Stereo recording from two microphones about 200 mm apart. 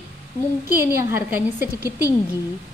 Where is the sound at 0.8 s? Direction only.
10° right (ahead or behind).